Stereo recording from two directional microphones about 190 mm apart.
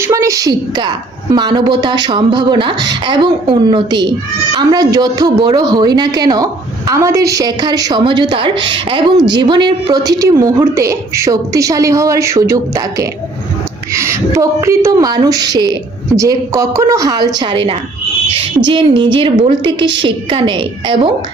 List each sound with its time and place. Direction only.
0.0 s speech: 15° right (ahead or behind)